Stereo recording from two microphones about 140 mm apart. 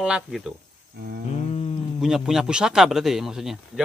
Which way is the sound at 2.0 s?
5° right (ahead or behind).